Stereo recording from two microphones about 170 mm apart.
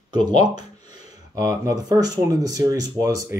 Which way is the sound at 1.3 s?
20° right (ahead or behind).